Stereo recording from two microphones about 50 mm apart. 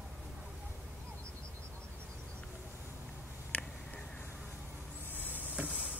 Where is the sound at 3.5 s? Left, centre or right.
Left.